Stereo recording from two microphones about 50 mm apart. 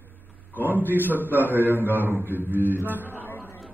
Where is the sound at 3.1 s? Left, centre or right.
Left.